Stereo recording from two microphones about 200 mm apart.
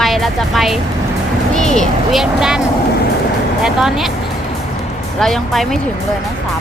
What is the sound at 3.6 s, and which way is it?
Speech, centre (ahead or behind).